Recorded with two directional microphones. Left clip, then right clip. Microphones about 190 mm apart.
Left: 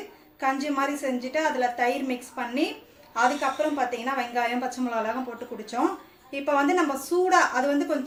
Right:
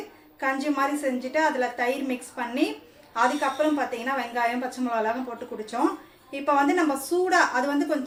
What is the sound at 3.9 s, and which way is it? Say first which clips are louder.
A woman's voice: even; centre (ahead or behind).